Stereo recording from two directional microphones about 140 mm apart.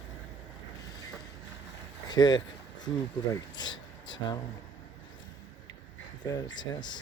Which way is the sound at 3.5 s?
30° left (ahead or behind).